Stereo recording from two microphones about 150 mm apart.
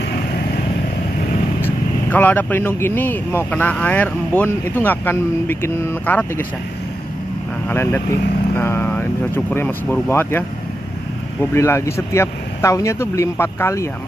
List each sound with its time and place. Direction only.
1.6 s speech: 10° left (ahead or behind)
7.7 s speech: 15° left (ahead or behind)
11.5 s speech: 20° left (ahead or behind)